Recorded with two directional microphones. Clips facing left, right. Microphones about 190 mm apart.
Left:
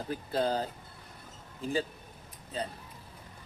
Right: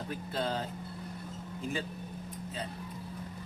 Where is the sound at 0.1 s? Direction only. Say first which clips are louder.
Left 5 dB; 35° left (ahead or behind).